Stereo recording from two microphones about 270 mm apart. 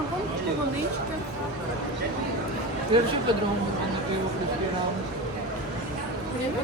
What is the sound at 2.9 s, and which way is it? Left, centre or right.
Speech, centre.